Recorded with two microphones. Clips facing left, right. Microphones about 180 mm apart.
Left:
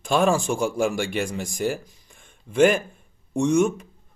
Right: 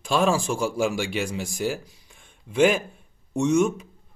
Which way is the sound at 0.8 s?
50° left (ahead or behind).